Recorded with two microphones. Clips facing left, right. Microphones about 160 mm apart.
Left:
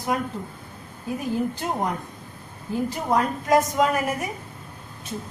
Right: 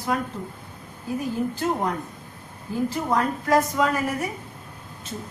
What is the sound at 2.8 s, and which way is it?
A woman's voice, 20° left (ahead or behind).